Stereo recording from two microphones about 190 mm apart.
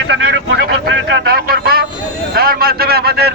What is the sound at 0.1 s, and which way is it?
Speech, 65° right (ahead or behind).